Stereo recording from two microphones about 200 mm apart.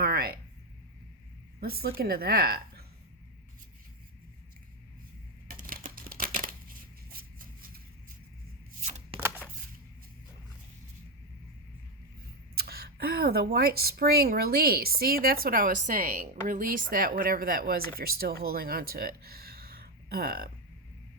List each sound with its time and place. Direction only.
0.0 s a sound: 50° right (ahead or behind)
1.6 s speech: 50° right (ahead or behind)
5.5 s crumpling: 45° right (ahead or behind)
7.1 s a sound: 45° right (ahead or behind)
8.8 s shuffling cards: 30° right (ahead or behind)
12.5 s speech: 50° right (ahead or behind)